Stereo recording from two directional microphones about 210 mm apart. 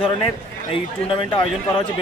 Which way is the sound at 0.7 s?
25° left (ahead or behind).